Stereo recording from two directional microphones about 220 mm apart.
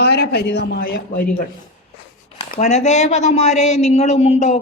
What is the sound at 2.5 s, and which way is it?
A man's voice, 30° left (ahead or behind).